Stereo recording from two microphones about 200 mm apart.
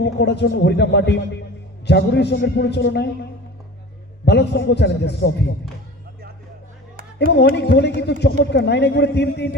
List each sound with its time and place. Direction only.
0.0 s speech: 60° left (ahead or behind)
4.3 s speech: 60° left (ahead or behind)
7.3 s speech: 60° left (ahead or behind)